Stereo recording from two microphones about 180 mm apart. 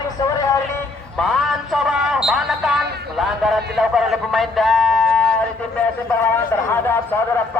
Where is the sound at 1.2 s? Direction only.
Centre (ahead or behind).